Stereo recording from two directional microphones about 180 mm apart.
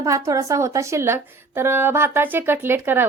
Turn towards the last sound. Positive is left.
turn(degrees=-10)  # may be behind; listen again after turning